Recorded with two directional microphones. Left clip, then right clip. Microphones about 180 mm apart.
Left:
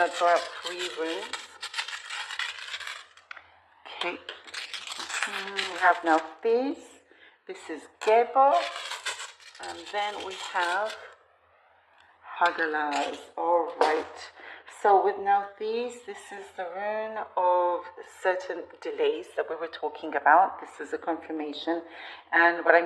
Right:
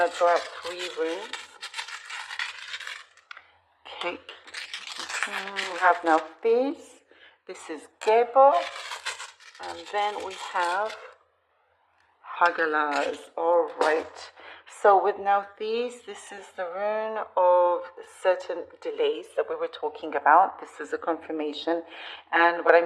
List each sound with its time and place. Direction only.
0.0 s speech: 15° right (ahead or behind)
3.9 s a sound: 15° right (ahead or behind)
4.9 s speech: 15° right (ahead or behind)
7.4 s speech: 35° right (ahead or behind)
8.0 s a woman's voice: 20° right (ahead or behind)
9.6 s a woman's voice: 20° right (ahead or behind)
12.3 s speech: 45° right (ahead or behind)
13.3 s speech: 55° right (ahead or behind)
14.2 s speech: 35° right (ahead or behind)
18.2 s a woman's voice: 25° right (ahead or behind)
20.7 s speech: 35° right (ahead or behind)